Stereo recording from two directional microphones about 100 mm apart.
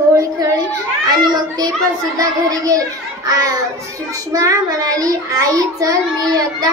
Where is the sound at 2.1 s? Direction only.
35° right (ahead or behind).